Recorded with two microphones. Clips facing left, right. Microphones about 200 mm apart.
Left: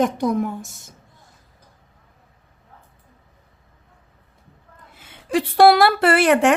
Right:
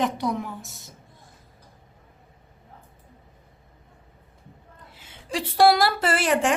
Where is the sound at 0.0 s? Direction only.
45° left (ahead or behind).